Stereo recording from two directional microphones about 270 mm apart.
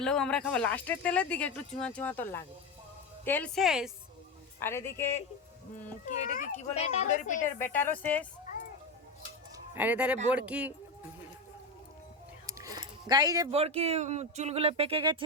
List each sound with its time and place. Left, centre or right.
0.0 s speech: centre
4.6 s a woman's voice: centre
5.8 s speech: left
7.6 s a woman's voice: centre
9.7 s speech: centre
12.5 s speech: centre